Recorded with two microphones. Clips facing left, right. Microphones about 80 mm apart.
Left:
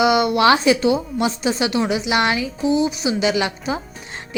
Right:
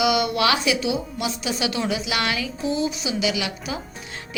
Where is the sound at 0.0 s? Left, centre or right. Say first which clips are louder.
Left 5 dB; left.